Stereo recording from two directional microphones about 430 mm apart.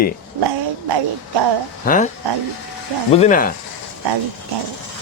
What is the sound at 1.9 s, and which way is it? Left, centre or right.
Speech, centre.